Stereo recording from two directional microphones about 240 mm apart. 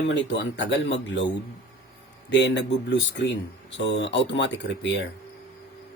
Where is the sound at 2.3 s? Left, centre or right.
Left.